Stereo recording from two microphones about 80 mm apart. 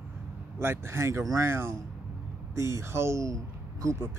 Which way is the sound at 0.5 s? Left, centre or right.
Right.